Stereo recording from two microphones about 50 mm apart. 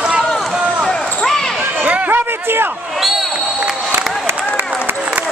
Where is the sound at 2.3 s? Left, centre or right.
Right.